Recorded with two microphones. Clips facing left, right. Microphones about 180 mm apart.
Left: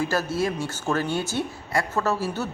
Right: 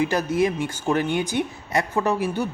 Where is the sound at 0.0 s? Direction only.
15° right (ahead or behind).